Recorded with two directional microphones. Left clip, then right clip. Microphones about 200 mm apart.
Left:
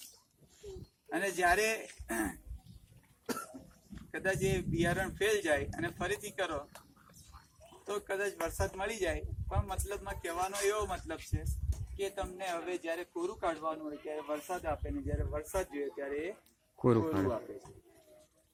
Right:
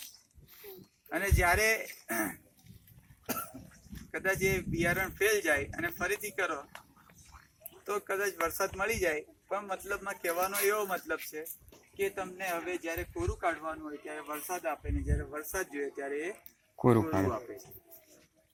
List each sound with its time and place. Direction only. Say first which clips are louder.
1.1 s speech: right 1 dB; 10° right (ahead or behind)
3.2 s cough: right 2 dB; 35° right (ahead or behind)
4.1 s a man's voice: right 3 dB; 5° right (ahead or behind)
7.9 s a man's voice: right 3 dB; centre (ahead or behind)
13.4 s a man's voice: right 2 dB; 5° right (ahead or behind)
16.8 s a man's voice: right 3 dB; 35° right (ahead or behind)